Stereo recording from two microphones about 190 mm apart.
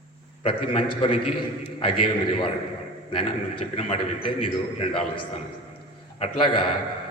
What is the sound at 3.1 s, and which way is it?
A man's voice, 30° left (ahead or behind).